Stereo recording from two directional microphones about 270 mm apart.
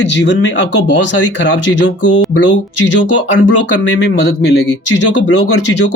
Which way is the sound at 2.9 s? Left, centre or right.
Left.